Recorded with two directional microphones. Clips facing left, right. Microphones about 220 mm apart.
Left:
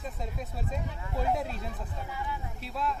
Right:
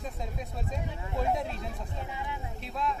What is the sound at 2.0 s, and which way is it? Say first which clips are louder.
Speech: left 3 dB; 20° right (ahead or behind).